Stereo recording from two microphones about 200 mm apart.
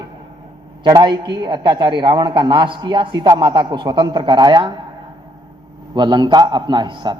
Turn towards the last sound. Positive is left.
turn(degrees=-20)  # may be behind; listen again after turning